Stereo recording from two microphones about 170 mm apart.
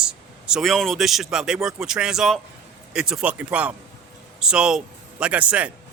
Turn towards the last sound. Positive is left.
turn(degrees=-10)  # may be behind; listen again after turning